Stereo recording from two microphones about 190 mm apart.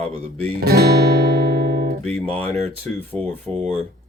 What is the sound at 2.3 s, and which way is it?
Speech, 5° left (ahead or behind).